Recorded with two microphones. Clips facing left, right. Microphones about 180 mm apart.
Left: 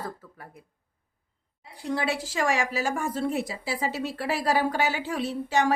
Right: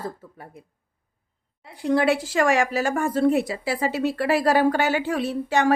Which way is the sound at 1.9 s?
60° right (ahead or behind).